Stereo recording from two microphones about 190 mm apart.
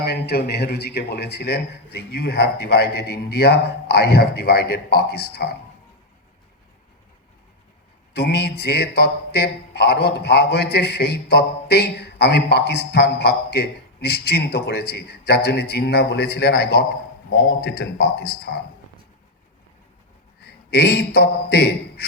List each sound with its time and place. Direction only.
0.0 s a man's voice: 55° left (ahead or behind)
8.1 s a man's voice: 60° left (ahead or behind)
20.4 s a man's voice: 55° left (ahead or behind)